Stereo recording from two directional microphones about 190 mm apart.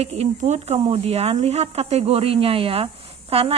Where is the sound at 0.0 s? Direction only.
35° right (ahead or behind).